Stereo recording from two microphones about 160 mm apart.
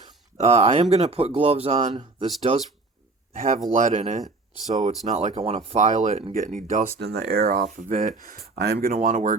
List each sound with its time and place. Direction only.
0.3 s speech: 40° right (ahead or behind)
3.3 s speech: 45° right (ahead or behind)
7.0 s speech: 90° right
7.4 s speech: 50° right (ahead or behind)